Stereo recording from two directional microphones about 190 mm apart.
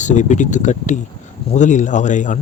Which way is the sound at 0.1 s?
40° left (ahead or behind).